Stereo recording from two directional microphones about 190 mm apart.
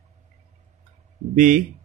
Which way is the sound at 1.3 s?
45° right (ahead or behind).